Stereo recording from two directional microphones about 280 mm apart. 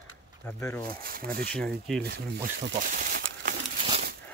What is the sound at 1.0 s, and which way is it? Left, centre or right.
Speech, right.